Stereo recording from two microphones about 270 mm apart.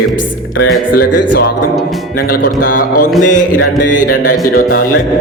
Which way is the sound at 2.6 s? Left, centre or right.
Left.